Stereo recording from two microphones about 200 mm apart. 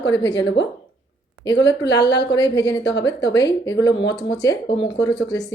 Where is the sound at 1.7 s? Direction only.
60° left (ahead or behind).